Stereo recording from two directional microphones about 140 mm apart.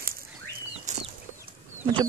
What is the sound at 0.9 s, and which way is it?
Chicken, 60° right (ahead or behind).